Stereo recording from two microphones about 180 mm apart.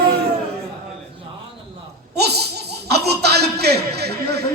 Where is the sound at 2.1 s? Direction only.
65° right (ahead or behind).